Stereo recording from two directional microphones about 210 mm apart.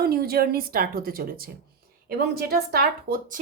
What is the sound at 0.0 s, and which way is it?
Speech, 45° right (ahead or behind).